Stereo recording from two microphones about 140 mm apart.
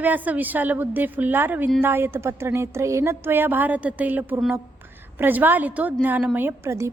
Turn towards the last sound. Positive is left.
turn(degrees=-20)  # may be behind; listen again after turning